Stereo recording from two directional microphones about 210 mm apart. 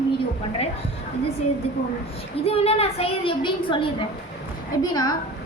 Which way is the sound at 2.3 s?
30° left (ahead or behind).